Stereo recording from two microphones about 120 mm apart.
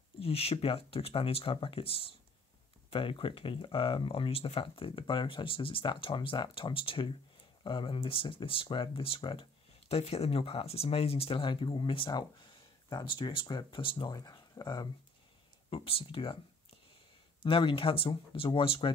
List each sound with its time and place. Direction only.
0.2 s speech: 55° left (ahead or behind); by 14.9 s 35° left (ahead or behind)
15.7 s speech: 50° left (ahead or behind)
17.4 s speech: 45° left (ahead or behind)